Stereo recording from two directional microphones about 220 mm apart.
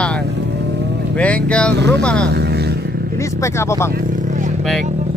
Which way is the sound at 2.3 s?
50° right (ahead or behind).